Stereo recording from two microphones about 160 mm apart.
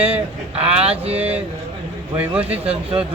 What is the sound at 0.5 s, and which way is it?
Speech, 40° right (ahead or behind).